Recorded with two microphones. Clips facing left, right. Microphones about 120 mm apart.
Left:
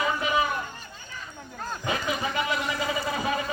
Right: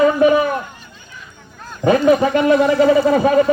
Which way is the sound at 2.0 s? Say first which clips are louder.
Right 17 dB; 55° right (ahead or behind).